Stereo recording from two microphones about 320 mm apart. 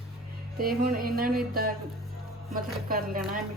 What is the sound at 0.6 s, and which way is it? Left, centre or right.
Speech, right.